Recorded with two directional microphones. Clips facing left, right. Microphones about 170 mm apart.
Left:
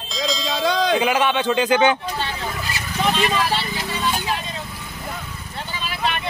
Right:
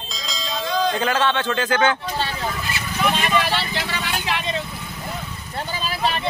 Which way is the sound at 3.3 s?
85° right.